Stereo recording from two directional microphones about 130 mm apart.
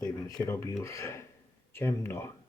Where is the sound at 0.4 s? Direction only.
20° left (ahead or behind).